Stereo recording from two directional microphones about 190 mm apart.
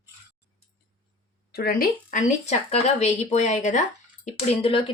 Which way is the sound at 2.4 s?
35° left (ahead or behind).